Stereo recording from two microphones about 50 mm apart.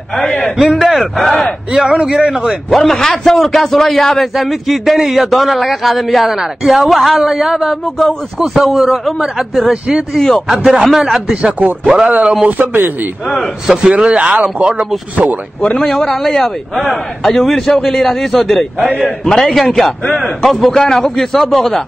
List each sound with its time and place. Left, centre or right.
0.2 s a man's voice: centre
0.6 s a man's voice: centre
1.7 s a man's voice: centre
2.7 s a man's voice: centre
10.1 s a man's voice: centre
10.5 s a man's voice: centre
11.8 s speech: centre
12.4 s speech: right
13.8 s speech: right
15.8 s a man's voice: centre